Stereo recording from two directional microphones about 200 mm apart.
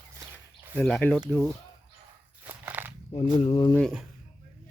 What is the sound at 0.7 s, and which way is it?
Speech, 5° left (ahead or behind).